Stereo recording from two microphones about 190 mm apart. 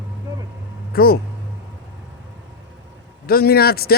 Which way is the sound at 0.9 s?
55° left (ahead or behind).